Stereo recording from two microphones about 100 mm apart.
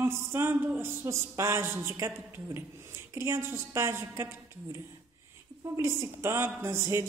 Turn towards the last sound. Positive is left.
turn(degrees=-25)  # may be behind; listen again after turning